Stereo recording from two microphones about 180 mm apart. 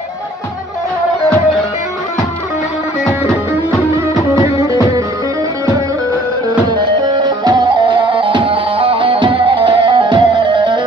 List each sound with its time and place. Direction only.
4.4 s music: 15° right (ahead or behind)
6.7 s music: 25° right (ahead or behind)